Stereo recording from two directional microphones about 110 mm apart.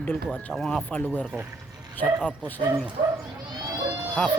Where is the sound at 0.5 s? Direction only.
5° left (ahead or behind).